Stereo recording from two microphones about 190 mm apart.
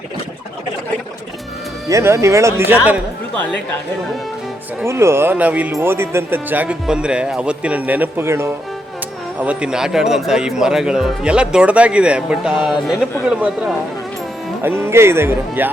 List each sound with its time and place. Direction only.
1.9 s speech: 15° right (ahead or behind)
4.8 s speech: 15° right (ahead or behind)